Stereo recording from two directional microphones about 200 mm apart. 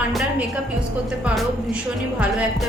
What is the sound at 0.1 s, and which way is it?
Music, centre (ahead or behind).